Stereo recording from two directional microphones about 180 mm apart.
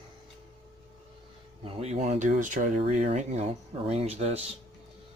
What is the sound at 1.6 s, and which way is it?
Speech, 35° right (ahead or behind).